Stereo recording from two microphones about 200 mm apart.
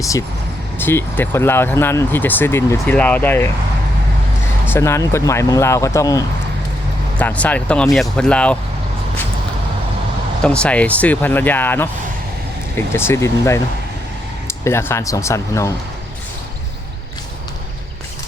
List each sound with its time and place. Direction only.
0.0 s speech: 15° left (ahead or behind)
4.6 s speech: 10° left (ahead or behind)
10.4 s speech: 5° left (ahead or behind)